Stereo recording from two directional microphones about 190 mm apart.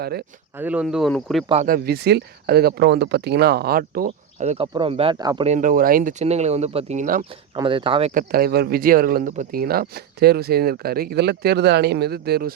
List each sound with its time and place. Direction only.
0.0 s speech: 55° right (ahead or behind)
0.5 s speech: 10° right (ahead or behind)
1.6 s speech: 50° right (ahead or behind)
4.4 s speech: 35° right (ahead or behind)
4.6 s speech: 25° right (ahead or behind)
5.5 s speech: 45° right (ahead or behind)
6.2 s speech: 35° right (ahead or behind)
7.5 s speech: 25° right (ahead or behind)
8.1 s speech: 50° right (ahead or behind)